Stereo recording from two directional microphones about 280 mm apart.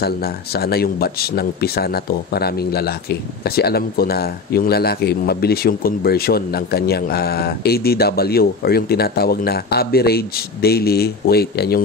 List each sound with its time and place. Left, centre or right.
0.0 s speech: left